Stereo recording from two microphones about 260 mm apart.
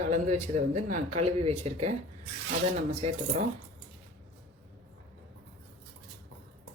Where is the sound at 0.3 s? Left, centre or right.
Right.